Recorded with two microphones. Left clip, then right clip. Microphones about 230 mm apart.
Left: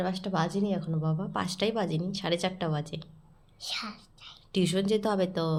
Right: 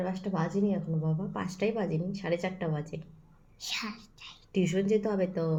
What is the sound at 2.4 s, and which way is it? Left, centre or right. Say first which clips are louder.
Speech: left 3 dB; left.